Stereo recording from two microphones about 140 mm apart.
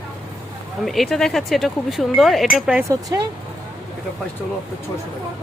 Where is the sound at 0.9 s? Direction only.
Centre (ahead or behind).